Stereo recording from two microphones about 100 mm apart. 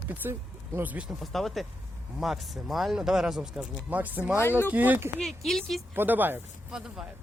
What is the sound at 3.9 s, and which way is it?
Speech, 15° right (ahead or behind).